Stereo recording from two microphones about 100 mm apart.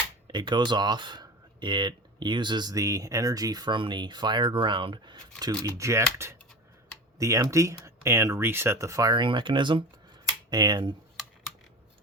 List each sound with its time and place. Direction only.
0.3 s speech: 50° right (ahead or behind)
5.4 s speech: 35° right (ahead or behind); by 9.8 s 55° right (ahead or behind)
10.5 s speech: 45° right (ahead or behind)